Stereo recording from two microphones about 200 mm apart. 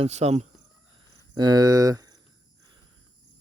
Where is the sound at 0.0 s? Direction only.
30° right (ahead or behind).